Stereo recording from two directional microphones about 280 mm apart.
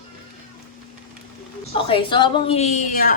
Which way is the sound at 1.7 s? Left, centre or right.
Centre.